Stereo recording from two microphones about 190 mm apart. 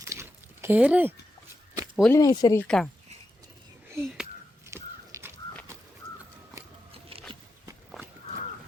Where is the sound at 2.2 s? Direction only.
20° left (ahead or behind).